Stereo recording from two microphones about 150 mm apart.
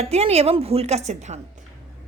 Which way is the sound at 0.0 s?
45° right (ahead or behind).